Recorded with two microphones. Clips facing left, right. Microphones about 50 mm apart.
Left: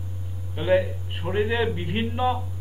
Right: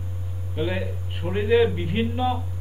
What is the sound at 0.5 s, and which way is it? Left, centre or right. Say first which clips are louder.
Speech: left 6 dB; centre.